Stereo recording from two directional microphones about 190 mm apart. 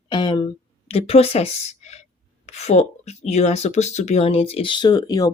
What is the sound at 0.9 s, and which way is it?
A woman's voice, 30° left (ahead or behind).